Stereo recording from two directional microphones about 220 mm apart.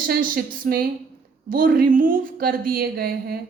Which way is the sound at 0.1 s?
40° right (ahead or behind).